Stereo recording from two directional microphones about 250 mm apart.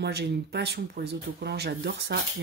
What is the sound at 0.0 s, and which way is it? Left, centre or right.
Speech, right.